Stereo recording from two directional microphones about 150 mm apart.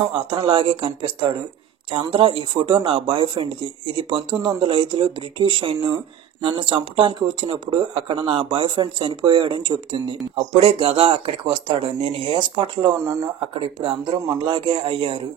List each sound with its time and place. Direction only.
0.1 s speech: 35° right (ahead or behind)